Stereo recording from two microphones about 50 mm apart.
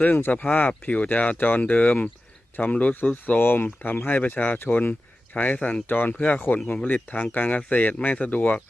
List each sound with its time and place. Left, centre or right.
0.0 s speech: left
0.7 s speech: left